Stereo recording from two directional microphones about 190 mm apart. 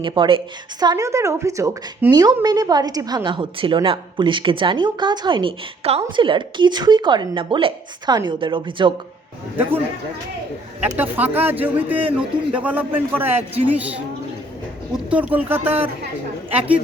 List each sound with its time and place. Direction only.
0.0 s speech: 25° right (ahead or behind)
10.9 s a man's voice: 10° right (ahead or behind)
14.9 s a man's voice: 5° right (ahead or behind)